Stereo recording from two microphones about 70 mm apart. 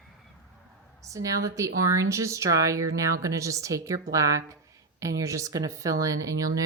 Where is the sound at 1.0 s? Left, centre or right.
Right.